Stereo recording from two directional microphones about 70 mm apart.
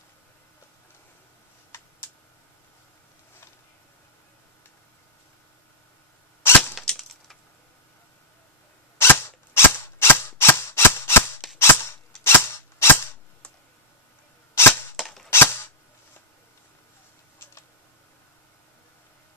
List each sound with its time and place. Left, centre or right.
6.4 s cap gun: left
6.8 s clang: centre
8.9 s cap gun: left
9.8 s gunshot: left
11.5 s cap gun: left
15.0 s cap gun: centre
15.2 s cap gun: left